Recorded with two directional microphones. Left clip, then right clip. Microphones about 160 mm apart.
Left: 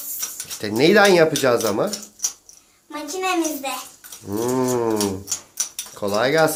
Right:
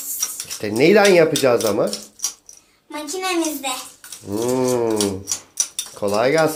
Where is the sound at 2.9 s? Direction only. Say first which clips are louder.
Even; 15° left (ahead or behind).